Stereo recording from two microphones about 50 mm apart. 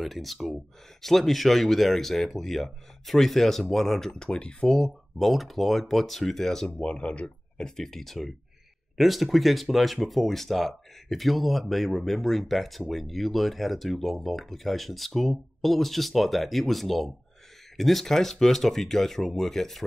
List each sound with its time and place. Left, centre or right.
0.0 s speech: centre
4.6 s speech: centre
6.8 s speech: left; by 19.8 s centre